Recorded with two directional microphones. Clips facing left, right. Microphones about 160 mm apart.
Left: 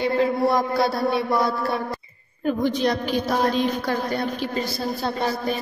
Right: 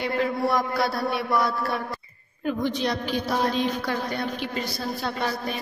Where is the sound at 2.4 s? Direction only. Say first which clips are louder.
Left 4 dB; 45° left (ahead or behind).